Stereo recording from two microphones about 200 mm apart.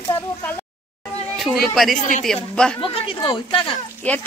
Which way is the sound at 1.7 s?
Centre (ahead or behind).